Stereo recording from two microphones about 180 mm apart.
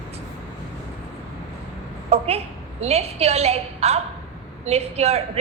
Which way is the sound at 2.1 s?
35° right (ahead or behind).